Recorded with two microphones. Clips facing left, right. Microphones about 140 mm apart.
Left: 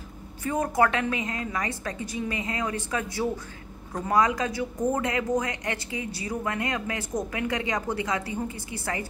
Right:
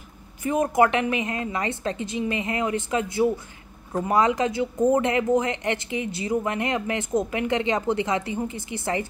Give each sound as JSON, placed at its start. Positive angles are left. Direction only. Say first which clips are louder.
{"t": 0.4, "sound": "speech", "louder": "right 4 dB", "side_deg": -20}